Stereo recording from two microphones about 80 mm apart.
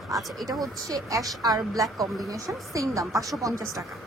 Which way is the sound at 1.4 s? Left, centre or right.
Right.